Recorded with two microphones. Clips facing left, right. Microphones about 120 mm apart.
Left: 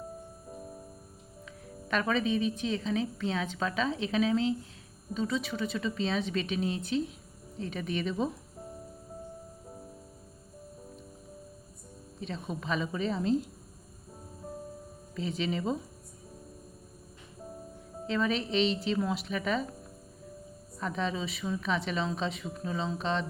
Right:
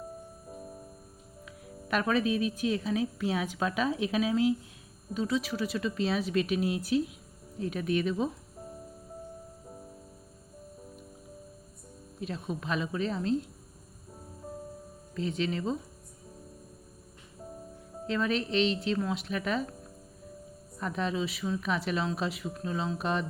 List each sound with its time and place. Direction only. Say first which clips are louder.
1.5 s a woman's voice: right 1 dB; 5° right (ahead or behind)
12.2 s a woman's voice: right 2 dB; 5° right (ahead or behind)
15.1 s a woman's voice: right 1 dB; centre (ahead or behind)
18.0 s a woman's voice: even; centre (ahead or behind)
20.7 s a woman's voice: right 1 dB; 5° right (ahead or behind)